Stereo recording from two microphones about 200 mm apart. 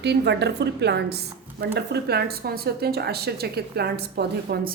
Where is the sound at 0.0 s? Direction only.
60° right (ahead or behind).